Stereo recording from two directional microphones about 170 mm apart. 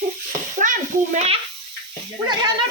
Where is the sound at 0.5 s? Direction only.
50° right (ahead or behind).